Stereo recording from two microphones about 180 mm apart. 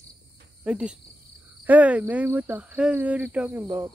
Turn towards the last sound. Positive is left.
turn(degrees=-20)  # may be behind; listen again after turning